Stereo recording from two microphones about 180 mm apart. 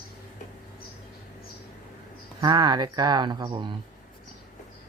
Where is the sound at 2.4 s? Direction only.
25° right (ahead or behind).